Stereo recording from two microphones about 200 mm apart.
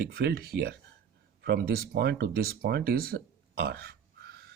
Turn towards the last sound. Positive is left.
turn(degrees=-50)  # may be behind; listen again after turning